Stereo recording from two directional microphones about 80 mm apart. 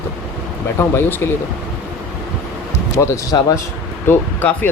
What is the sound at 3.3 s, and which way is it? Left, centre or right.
Speech, left.